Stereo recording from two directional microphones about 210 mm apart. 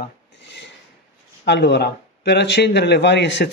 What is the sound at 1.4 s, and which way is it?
Speech, 55° left (ahead or behind).